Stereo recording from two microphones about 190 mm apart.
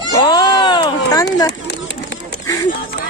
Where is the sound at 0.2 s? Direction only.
25° left (ahead or behind).